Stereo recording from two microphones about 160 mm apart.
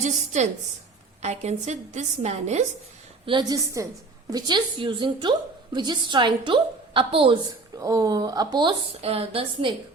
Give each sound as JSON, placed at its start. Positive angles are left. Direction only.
{"t": 0.3, "sound": "a woman's voice", "side_deg": -45}
{"t": 3.2, "sound": "a woman's voice", "side_deg": -25}
{"t": 7.8, "sound": "a woman's voice", "side_deg": -20}
{"t": 8.9, "sound": "a woman's voice", "side_deg": -40}